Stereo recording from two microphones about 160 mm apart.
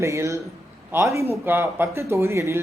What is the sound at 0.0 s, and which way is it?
A man's voice, 20° right (ahead or behind).